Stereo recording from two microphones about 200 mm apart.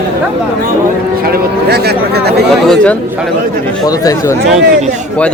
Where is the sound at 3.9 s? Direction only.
20° left (ahead or behind).